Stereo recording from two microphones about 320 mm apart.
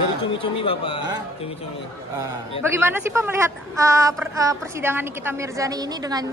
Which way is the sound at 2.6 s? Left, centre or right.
Centre.